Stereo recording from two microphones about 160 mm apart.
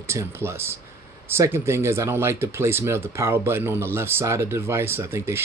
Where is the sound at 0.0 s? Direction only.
15° right (ahead or behind).